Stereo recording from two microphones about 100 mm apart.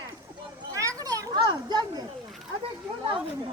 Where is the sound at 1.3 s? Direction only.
50° right (ahead or behind).